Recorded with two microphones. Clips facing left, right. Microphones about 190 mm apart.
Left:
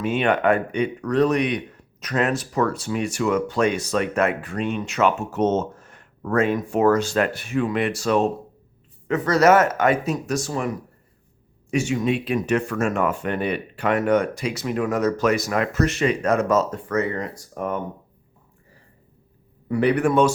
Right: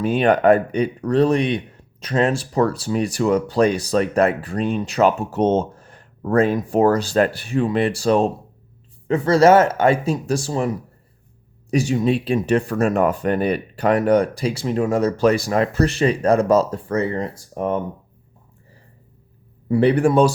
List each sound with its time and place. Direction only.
0.0 s speech: 35° right (ahead or behind)
11.7 s speech: 35° right (ahead or behind)
19.6 s speech: 30° right (ahead or behind)